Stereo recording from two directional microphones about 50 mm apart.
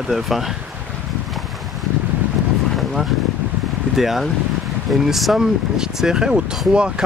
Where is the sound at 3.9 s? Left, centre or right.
Centre.